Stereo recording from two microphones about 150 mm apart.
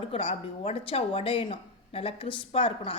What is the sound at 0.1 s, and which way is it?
Speech, 40° left (ahead or behind).